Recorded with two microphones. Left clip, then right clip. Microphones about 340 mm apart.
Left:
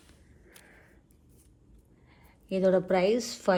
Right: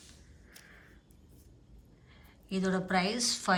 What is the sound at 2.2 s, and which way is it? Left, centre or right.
A woman's voice, centre.